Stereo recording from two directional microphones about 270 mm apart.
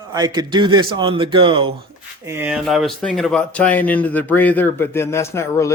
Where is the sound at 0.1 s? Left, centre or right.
Centre.